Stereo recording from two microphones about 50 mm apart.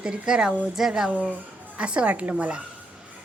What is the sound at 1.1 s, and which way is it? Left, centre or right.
A woman's voice, right.